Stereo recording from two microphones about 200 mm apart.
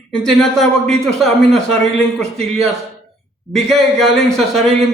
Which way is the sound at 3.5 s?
Centre (ahead or behind).